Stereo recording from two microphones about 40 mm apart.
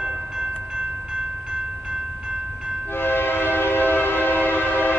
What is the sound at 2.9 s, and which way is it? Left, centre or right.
Train, left.